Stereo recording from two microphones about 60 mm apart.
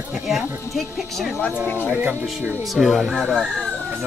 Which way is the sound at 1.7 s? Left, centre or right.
Right.